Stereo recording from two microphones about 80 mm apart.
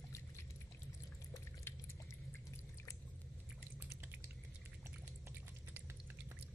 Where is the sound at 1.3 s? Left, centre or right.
Left.